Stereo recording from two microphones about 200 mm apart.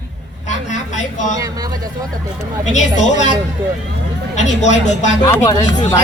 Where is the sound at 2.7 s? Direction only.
35° left (ahead or behind).